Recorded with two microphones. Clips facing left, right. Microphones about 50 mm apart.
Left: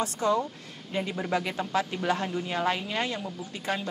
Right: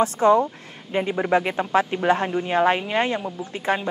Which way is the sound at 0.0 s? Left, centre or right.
Right.